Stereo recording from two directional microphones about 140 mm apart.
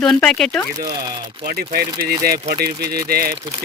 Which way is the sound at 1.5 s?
90° right.